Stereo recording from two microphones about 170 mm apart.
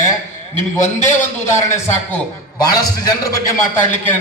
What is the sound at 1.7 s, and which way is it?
Speech, 10° left (ahead or behind).